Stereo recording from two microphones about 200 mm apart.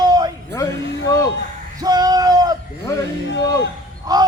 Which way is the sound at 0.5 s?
15° left (ahead or behind).